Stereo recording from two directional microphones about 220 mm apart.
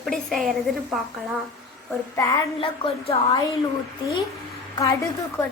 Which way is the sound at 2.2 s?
15° left (ahead or behind).